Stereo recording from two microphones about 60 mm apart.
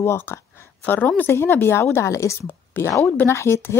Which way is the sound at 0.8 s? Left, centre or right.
Left.